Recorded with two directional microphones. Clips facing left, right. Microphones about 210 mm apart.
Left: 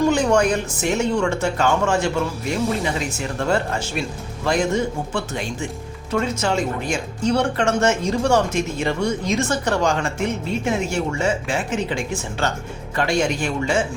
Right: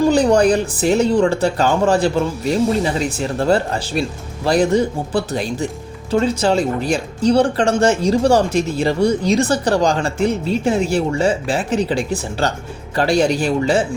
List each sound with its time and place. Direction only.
0.1 s speech: 35° right (ahead or behind)